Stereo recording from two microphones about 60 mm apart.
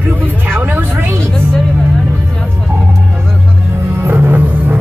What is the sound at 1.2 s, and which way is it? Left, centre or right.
Music, centre.